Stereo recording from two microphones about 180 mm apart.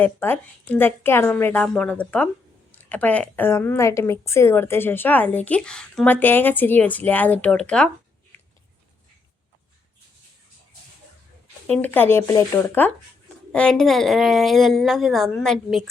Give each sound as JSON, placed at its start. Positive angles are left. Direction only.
{"t": 0.0, "sound": "a woman's voice", "side_deg": 10}
{"t": 11.7, "sound": "a woman's voice", "side_deg": 10}